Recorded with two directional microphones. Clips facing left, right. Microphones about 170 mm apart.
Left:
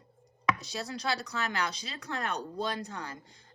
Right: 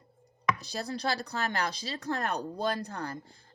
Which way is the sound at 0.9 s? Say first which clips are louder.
Right 2 dB; 35° right (ahead or behind).